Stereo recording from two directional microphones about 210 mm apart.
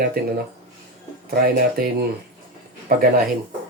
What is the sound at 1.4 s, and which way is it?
Speech, 45° right (ahead or behind).